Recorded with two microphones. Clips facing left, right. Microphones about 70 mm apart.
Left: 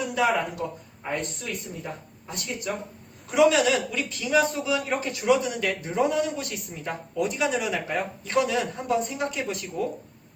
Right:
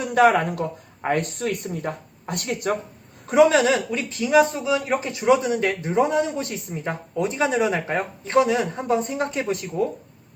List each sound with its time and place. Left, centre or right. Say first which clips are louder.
0.1 s speech: right 9 dB; right
3.2 s speech: right 4 dB; right